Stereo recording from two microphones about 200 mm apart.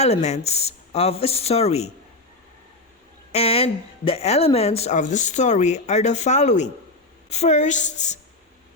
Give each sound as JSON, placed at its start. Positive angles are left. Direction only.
{"t": 0.0, "sound": "speech", "side_deg": 35}
{"t": 3.3, "sound": "speech", "side_deg": 30}